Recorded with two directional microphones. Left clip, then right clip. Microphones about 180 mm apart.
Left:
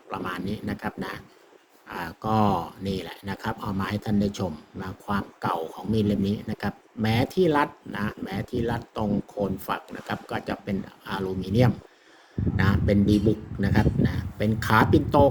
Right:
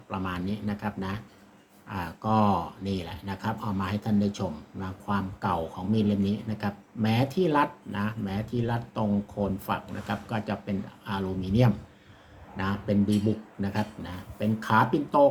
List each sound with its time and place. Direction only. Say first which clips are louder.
0.1 s speech: left 2 dB; 45° left (ahead or behind)